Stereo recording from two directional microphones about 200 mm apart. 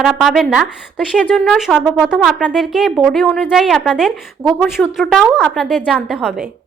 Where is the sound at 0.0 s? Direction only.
Centre (ahead or behind).